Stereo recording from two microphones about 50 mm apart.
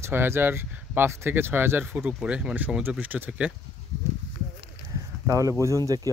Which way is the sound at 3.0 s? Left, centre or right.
Right.